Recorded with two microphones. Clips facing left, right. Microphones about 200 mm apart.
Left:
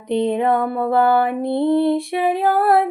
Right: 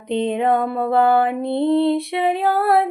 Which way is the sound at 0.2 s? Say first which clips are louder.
Even; 20° right (ahead or behind).